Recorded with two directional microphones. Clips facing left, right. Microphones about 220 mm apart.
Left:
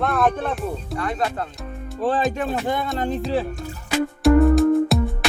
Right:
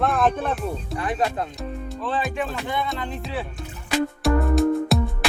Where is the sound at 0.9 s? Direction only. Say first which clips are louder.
Right 1 dB; 15° right (ahead or behind).